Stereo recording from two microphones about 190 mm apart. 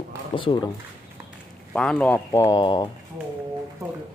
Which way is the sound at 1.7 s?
5° left (ahead or behind).